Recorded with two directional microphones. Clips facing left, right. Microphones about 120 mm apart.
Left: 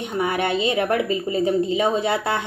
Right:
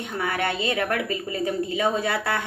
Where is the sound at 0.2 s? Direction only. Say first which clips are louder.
Left 5 dB; 20° left (ahead or behind).